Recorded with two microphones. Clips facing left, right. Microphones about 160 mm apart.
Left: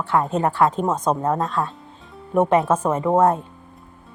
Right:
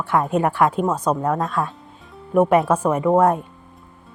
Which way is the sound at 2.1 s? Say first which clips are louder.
Right 2 dB; 5° right (ahead or behind).